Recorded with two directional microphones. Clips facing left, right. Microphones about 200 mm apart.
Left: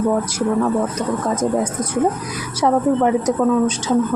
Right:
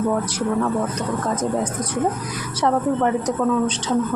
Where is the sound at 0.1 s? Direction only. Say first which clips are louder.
Left 3 dB; 10° left (ahead or behind).